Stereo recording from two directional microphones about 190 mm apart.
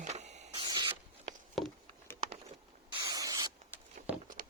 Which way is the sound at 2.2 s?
35° right (ahead or behind).